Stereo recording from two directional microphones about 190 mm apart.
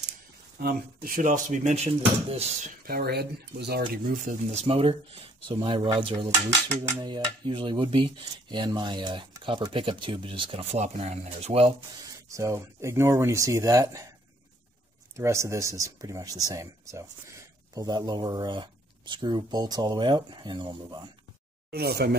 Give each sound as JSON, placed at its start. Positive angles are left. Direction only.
{"t": 0.6, "sound": "speech", "side_deg": -55}
{"t": 2.8, "sound": "speech", "side_deg": -55}
{"t": 3.9, "sound": "speech", "side_deg": -45}
{"t": 12.3, "sound": "speech", "side_deg": -15}
{"t": 15.1, "sound": "speech", "side_deg": -15}
{"t": 21.6, "sound": "speech", "side_deg": -55}